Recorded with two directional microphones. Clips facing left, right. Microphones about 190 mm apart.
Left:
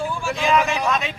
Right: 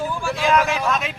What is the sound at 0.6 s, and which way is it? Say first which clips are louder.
Speech: right 1 dB; 15° left (ahead or behind).